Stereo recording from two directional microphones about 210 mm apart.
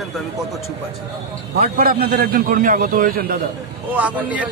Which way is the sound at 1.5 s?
45° right (ahead or behind).